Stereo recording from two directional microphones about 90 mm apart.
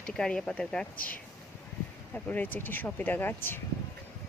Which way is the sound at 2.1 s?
20° left (ahead or behind).